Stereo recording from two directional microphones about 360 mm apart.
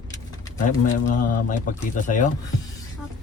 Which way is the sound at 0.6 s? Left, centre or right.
Left.